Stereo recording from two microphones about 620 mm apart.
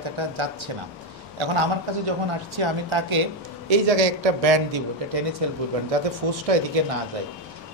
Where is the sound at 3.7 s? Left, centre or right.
Right.